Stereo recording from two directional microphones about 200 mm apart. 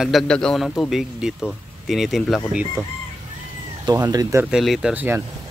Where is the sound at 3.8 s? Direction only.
20° right (ahead or behind).